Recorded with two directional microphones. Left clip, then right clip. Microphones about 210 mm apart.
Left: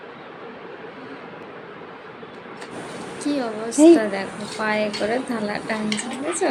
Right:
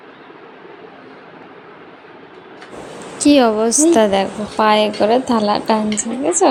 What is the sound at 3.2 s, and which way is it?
A woman's voice, 40° right (ahead or behind).